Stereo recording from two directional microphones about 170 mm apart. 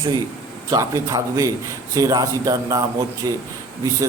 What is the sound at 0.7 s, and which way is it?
Speech, 20° right (ahead or behind).